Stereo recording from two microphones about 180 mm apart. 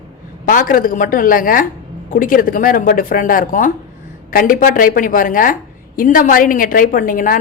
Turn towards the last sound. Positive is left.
turn(degrees=50)  # may be behind; listen again after turning